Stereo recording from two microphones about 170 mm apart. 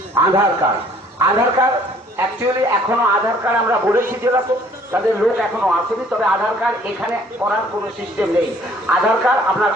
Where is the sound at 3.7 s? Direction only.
15° right (ahead or behind).